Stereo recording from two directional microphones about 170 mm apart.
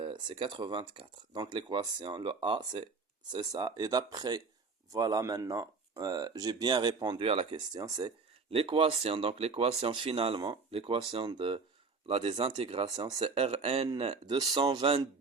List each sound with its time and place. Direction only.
0.0 s speech: 30° right (ahead or behind)